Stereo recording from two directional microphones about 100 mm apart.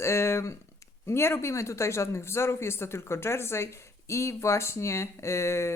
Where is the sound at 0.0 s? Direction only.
25° left (ahead or behind).